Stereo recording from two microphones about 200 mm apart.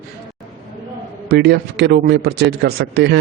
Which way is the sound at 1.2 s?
55° right (ahead or behind).